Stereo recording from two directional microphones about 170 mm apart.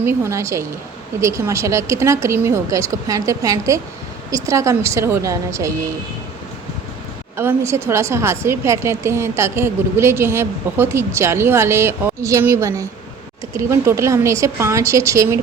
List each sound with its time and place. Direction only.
0.0 s a woman's voice: 15° right (ahead or behind)
7.3 s a woman's voice: 15° right (ahead or behind)